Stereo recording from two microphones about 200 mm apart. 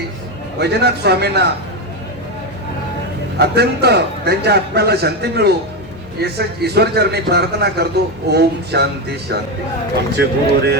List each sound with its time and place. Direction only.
0.6 s a man's voice: 55° right (ahead or behind)
3.3 s a man's voice: 55° right (ahead or behind)